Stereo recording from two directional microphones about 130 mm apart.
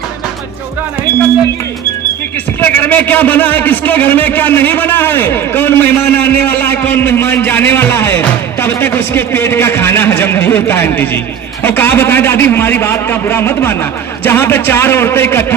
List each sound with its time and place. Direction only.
2.6 s a man's voice: 15° left (ahead or behind)